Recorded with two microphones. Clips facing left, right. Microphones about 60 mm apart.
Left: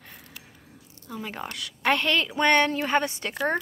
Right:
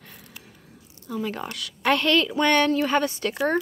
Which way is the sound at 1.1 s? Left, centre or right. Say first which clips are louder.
Right 5 dB; centre.